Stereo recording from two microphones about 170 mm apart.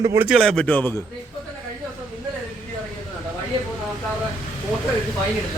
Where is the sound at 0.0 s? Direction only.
15° right (ahead or behind).